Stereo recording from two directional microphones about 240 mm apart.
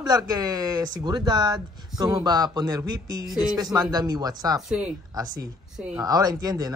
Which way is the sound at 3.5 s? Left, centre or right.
Centre.